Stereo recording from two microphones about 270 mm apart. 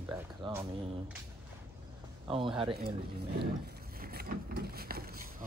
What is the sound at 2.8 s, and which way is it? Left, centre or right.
Speech, right.